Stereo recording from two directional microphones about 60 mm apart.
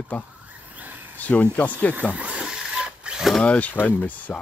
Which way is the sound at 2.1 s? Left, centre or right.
Right.